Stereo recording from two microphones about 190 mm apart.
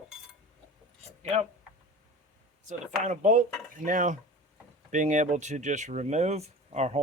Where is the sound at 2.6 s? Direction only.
40° right (ahead or behind).